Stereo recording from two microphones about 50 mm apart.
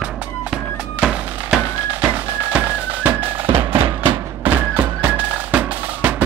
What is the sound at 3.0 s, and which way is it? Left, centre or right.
Music, right.